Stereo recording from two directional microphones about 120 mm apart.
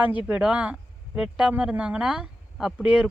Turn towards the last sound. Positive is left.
turn(degrees=-10)  # may be behind; listen again after turning